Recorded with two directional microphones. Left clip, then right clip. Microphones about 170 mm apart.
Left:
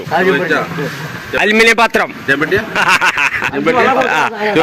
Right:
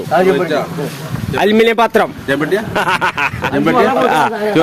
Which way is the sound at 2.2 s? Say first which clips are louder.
Left 2 dB; 90° right.